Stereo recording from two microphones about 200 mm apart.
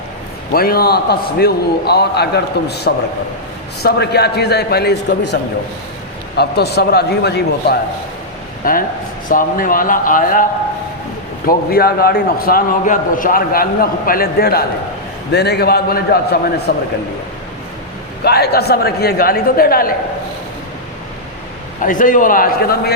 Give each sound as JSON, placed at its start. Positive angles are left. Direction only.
{"t": 0.5, "sound": "a man's voice", "side_deg": 50}
{"t": 8.6, "sound": "a man's voice", "side_deg": 45}
{"t": 11.4, "sound": "a man's voice", "side_deg": 50}
{"t": 18.2, "sound": "a man's voice", "side_deg": 55}
{"t": 21.8, "sound": "a man's voice", "side_deg": 40}